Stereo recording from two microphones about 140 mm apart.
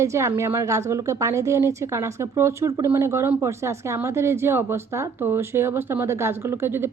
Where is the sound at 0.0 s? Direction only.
20° right (ahead or behind).